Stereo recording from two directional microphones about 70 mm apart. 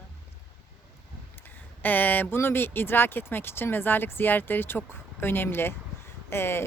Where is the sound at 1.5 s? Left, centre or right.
Left.